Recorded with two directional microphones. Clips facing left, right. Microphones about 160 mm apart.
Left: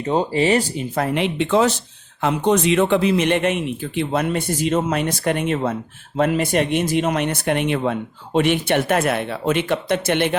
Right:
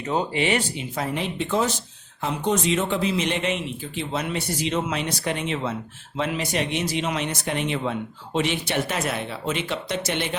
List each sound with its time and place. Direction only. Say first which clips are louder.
0.0 s speech: left 5 dB; 30° left (ahead or behind)
0.9 s speech: left 7 dB; 65° left (ahead or behind)